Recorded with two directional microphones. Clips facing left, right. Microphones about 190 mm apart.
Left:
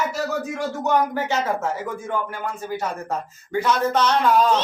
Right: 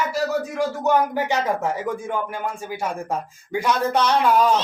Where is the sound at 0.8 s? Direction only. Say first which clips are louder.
Even; 10° right (ahead or behind).